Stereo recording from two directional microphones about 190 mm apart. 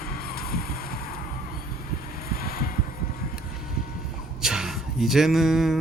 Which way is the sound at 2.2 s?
50° left (ahead or behind).